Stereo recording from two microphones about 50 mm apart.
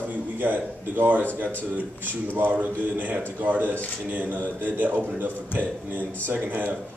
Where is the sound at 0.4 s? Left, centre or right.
Right.